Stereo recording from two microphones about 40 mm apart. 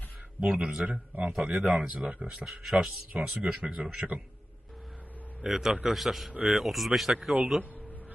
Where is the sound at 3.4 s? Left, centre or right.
Right.